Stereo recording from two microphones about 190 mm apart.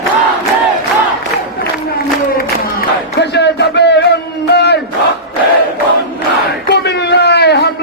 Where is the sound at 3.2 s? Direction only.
65° left (ahead or behind).